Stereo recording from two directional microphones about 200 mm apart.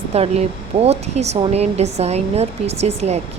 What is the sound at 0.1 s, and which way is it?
Speech, 30° right (ahead or behind).